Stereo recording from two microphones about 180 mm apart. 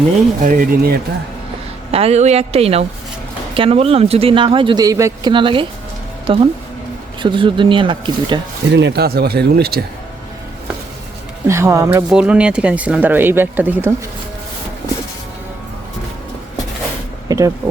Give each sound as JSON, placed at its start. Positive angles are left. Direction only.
{"t": 0.4, "sound": "speech", "side_deg": -55}
{"t": 1.9, "sound": "a woman's voice", "side_deg": -35}
{"t": 8.7, "sound": "speech", "side_deg": -70}
{"t": 11.4, "sound": "speech", "side_deg": -15}
{"t": 12.0, "sound": "speech", "side_deg": -5}
{"t": 17.2, "sound": "a sound", "side_deg": -20}